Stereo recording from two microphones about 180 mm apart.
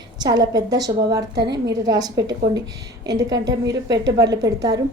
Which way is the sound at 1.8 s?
20° right (ahead or behind).